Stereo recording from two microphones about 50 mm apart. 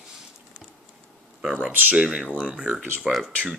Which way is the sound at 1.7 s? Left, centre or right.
Right.